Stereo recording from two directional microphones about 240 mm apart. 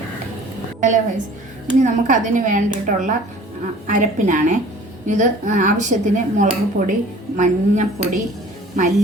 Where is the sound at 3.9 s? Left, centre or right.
Right.